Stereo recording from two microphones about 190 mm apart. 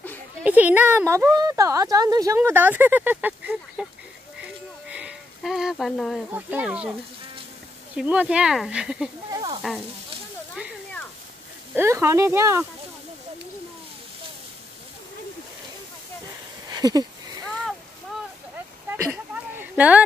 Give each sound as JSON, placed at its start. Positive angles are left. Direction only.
{"t": 0.4, "sound": "speech", "side_deg": -10}
{"t": 4.4, "sound": "a sound", "side_deg": -5}
{"t": 6.3, "sound": "speech", "side_deg": -10}
{"t": 7.9, "sound": "speech", "side_deg": -5}
{"t": 9.3, "sound": "speech", "side_deg": -20}
{"t": 9.6, "sound": "speech", "side_deg": 0}
{"t": 11.7, "sound": "speech", "side_deg": -15}
{"t": 16.6, "sound": "a sound", "side_deg": -20}
{"t": 19.0, "sound": "a sound", "side_deg": -10}